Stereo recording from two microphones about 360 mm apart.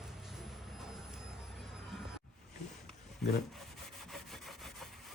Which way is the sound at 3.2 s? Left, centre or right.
Centre.